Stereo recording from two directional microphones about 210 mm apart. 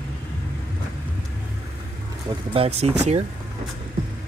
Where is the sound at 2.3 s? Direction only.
25° right (ahead or behind).